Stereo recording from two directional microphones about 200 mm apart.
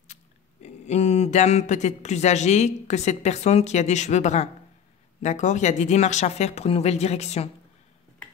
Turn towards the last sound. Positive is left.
turn(degrees=35)  # may be behind; listen again after turning